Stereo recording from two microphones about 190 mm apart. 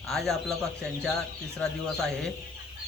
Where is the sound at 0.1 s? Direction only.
Centre (ahead or behind).